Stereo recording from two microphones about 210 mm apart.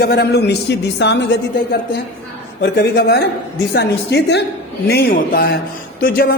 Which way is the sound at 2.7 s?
50° left (ahead or behind).